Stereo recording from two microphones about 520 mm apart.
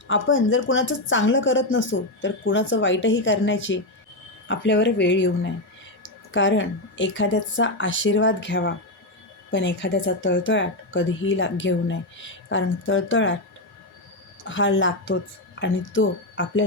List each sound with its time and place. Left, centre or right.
0.1 s speech: left
14.4 s speech: left